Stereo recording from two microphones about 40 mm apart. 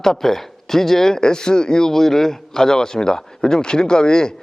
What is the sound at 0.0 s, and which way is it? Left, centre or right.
Speech, centre.